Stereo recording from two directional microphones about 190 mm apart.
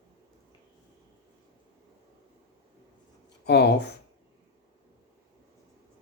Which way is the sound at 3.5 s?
60° left (ahead or behind).